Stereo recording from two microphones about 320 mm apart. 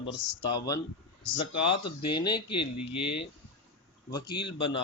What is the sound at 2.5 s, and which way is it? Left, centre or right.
Speech, left.